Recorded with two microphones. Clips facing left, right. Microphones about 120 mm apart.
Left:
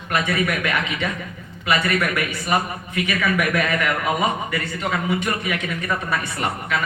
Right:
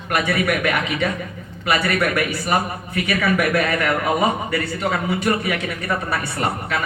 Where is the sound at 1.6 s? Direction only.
30° right (ahead or behind).